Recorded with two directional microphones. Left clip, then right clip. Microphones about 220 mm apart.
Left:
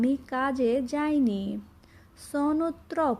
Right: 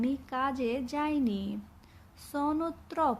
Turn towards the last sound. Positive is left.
turn(degrees=15)  # may be behind; listen again after turning